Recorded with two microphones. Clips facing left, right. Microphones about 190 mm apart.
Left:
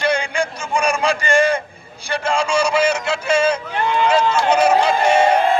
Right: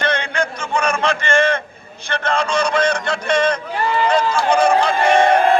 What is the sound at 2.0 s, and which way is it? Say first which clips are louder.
Speech: even; 10° left (ahead or behind).